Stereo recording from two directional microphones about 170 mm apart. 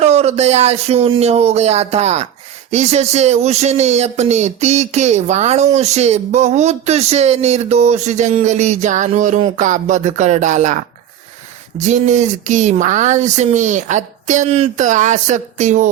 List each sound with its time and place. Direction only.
0.0 s speech: 40° right (ahead or behind)
11.8 s speech: 45° right (ahead or behind)